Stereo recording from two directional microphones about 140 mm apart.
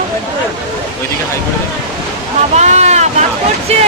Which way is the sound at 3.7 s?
50° right (ahead or behind).